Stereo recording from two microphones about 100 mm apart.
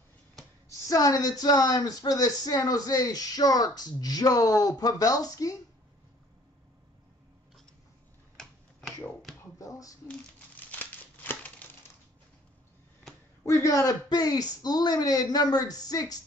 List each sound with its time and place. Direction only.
0.7 s speech: 35° left (ahead or behind)
8.4 s finger snapping: 5° left (ahead or behind)
9.4 s a sound: 35° left (ahead or behind)
10.0 s crumpling: 15° left (ahead or behind)
13.5 s speech: 30° left (ahead or behind)